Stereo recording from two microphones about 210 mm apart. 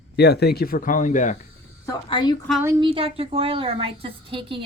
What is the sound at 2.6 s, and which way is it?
A woman's voice, 20° right (ahead or behind).